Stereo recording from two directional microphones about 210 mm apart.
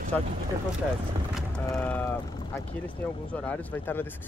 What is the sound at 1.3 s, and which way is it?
Vehicle, 5° left (ahead or behind).